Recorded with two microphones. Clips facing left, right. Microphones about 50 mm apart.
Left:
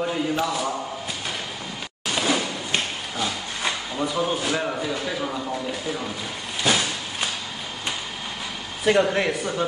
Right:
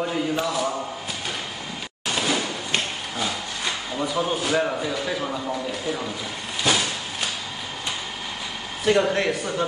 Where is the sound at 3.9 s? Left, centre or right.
Centre.